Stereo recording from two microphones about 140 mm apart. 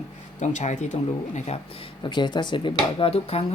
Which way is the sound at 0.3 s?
60° left (ahead or behind).